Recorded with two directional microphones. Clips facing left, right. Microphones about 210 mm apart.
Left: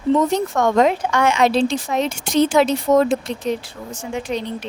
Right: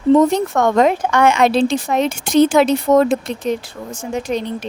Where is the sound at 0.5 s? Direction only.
55° right (ahead or behind).